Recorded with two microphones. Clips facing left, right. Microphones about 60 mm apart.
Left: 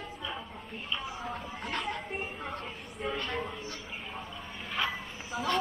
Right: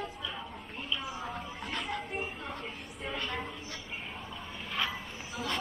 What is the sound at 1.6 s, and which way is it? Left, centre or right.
Children playing, centre.